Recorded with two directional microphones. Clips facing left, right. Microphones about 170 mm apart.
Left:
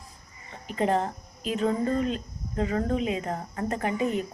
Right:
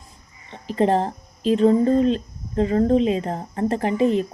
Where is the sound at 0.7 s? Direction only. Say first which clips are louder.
Right 6 dB; 30° right (ahead or behind).